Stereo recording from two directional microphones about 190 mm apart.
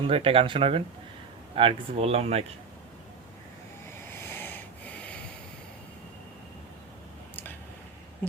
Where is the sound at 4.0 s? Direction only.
10° left (ahead or behind).